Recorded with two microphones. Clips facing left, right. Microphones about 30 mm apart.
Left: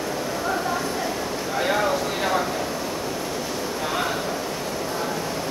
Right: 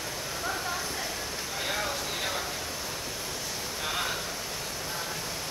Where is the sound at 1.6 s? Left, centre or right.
Left.